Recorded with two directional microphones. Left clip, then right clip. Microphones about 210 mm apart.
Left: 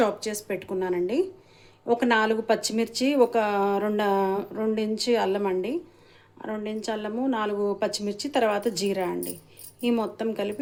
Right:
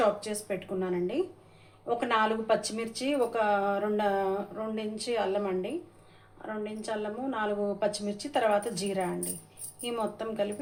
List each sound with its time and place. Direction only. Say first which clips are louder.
0.2 s speech: left 4 dB; 50° left (ahead or behind)